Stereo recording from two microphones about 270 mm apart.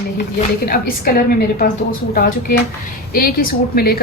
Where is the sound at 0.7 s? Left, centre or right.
Left.